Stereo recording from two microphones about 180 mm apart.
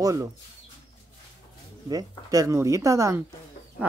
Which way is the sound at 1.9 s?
20° right (ahead or behind).